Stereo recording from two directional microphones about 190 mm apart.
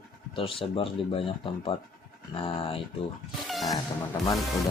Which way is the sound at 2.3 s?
30° left (ahead or behind).